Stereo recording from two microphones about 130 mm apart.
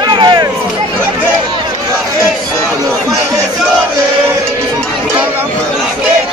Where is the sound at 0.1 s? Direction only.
40° right (ahead or behind).